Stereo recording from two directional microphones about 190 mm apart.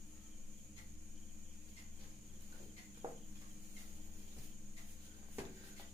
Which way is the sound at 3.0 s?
25° right (ahead or behind).